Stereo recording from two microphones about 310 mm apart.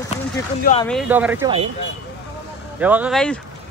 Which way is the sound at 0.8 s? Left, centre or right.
Centre.